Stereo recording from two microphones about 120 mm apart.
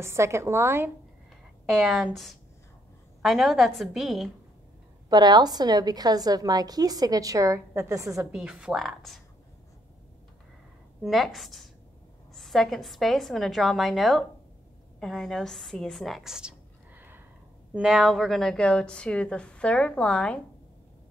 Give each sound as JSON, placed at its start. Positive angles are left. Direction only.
{"t": 0.0, "sound": "a woman's voice", "side_deg": -25}
{"t": 1.8, "sound": "a woman's voice", "side_deg": 0}
{"t": 3.2, "sound": "a woman's voice", "side_deg": 0}
{"t": 5.1, "sound": "a woman's voice", "side_deg": -35}
{"t": 8.3, "sound": "a woman's voice", "side_deg": -10}
{"t": 11.0, "sound": "a woman's voice", "side_deg": 0}